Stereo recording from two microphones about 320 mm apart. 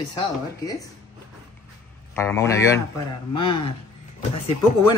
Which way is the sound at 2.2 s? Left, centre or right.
Centre.